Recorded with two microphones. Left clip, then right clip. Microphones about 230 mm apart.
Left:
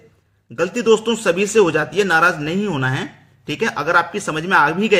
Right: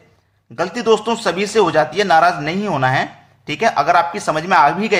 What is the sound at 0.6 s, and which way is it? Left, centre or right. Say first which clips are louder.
A man's voice: even; left.